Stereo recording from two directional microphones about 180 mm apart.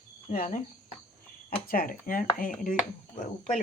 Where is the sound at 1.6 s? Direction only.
55° left (ahead or behind).